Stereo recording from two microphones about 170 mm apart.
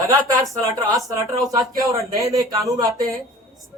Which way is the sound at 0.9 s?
20° right (ahead or behind).